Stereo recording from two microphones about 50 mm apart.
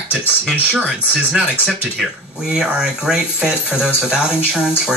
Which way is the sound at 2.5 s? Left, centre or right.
Centre.